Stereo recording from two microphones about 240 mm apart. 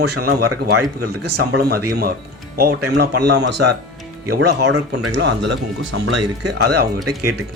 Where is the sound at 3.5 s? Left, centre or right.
Right.